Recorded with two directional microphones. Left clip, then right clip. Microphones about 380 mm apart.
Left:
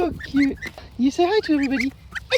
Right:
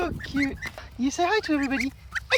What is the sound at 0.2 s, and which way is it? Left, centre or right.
Speech, centre.